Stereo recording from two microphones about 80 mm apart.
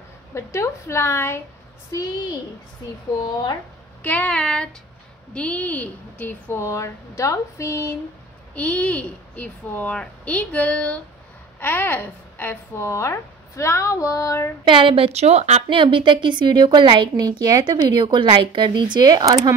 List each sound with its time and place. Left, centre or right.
0.3 s a woman's voice: left
1.9 s a child's voice: left
4.0 s a child's voice: centre
6.6 s a woman's voice: left
8.5 s a child's voice: centre; by 14.5 s left
14.6 s a woman's voice: right
15.7 s a woman's voice: right